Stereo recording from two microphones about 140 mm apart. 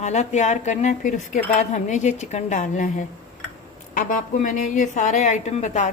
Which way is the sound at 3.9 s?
70° left (ahead or behind).